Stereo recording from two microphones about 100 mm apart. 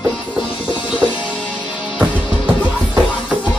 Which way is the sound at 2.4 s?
15° right (ahead or behind).